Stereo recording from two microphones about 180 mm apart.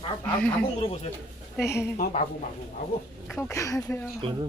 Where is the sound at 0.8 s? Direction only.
35° left (ahead or behind).